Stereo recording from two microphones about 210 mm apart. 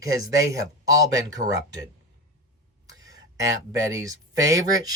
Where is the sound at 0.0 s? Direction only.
15° right (ahead or behind).